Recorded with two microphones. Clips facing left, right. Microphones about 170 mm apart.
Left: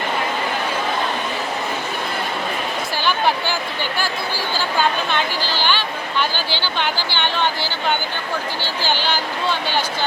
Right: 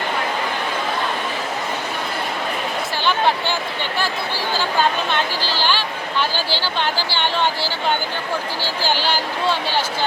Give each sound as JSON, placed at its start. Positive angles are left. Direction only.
{"t": 5.5, "sound": "speech", "side_deg": -35}
{"t": 8.8, "sound": "speech", "side_deg": -40}